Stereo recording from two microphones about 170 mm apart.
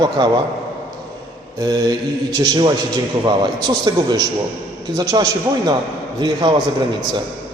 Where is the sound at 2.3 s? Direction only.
25° right (ahead or behind).